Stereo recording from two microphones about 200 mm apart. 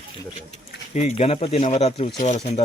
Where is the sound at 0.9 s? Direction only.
35° left (ahead or behind).